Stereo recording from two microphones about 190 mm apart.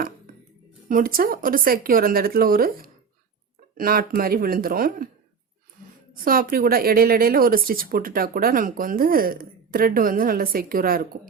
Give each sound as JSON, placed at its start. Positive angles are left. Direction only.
{"t": 0.9, "sound": "speech", "side_deg": -45}
{"t": 6.2, "sound": "speech", "side_deg": -50}